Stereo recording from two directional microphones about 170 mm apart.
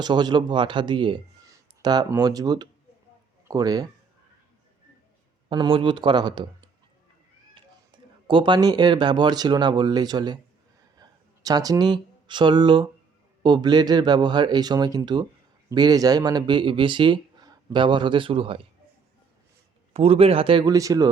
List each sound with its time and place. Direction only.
0.0 s speech: 25° right (ahead or behind)
5.5 s speech: 30° right (ahead or behind)
8.3 s speech: 25° right (ahead or behind)
10.9 s a sound: 20° right (ahead or behind)
13.4 s speech: 25° right (ahead or behind)
19.9 s speech: 35° right (ahead or behind)